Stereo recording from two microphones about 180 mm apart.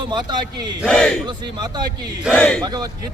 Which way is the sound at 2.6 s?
20° right (ahead or behind).